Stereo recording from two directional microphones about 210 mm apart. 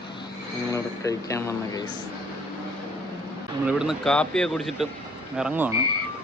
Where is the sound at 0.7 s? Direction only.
15° left (ahead or behind).